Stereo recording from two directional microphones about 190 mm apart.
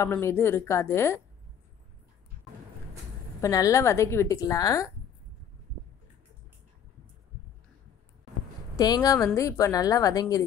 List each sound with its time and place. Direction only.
0.0 s a woman's voice: 15° left (ahead or behind)
3.3 s a woman's voice: 15° left (ahead or behind)
8.7 s a woman's voice: 20° left (ahead or behind)